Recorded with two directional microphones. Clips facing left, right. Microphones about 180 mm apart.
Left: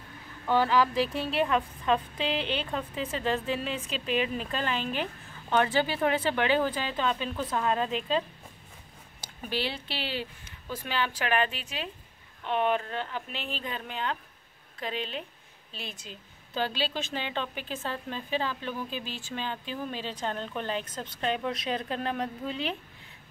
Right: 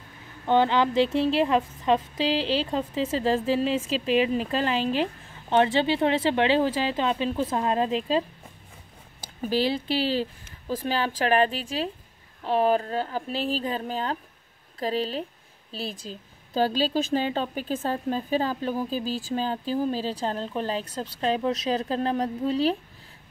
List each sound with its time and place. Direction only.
0.5 s speech: 25° right (ahead or behind)
9.4 s speech: 40° right (ahead or behind)